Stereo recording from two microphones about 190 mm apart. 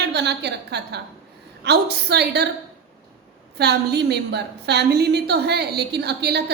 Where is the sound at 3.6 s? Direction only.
60° right (ahead or behind).